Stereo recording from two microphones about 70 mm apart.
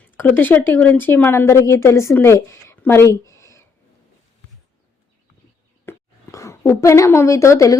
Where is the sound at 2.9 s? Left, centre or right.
Left.